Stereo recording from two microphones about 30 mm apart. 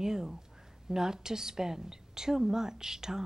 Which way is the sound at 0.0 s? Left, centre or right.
Centre.